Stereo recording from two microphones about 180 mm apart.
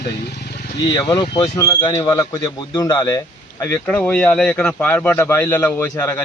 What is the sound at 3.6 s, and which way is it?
Speech, 10° left (ahead or behind).